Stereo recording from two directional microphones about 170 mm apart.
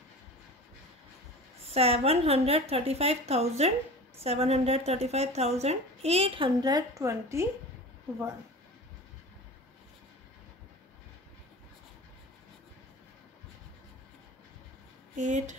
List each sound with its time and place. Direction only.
1.6 s speech: 35° right (ahead or behind); by 7.4 s 15° right (ahead or behind)
15.1 s speech: 45° right (ahead or behind)